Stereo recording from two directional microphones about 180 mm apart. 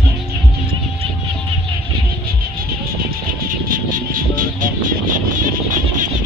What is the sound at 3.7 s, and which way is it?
Music, 50° right (ahead or behind).